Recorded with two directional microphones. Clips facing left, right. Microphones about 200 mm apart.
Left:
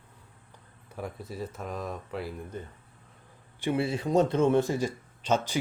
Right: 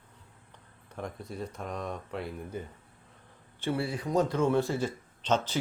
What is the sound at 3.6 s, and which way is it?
Speech, 20° left (ahead or behind).